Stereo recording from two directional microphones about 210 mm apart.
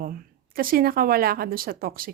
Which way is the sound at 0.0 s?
45° right (ahead or behind).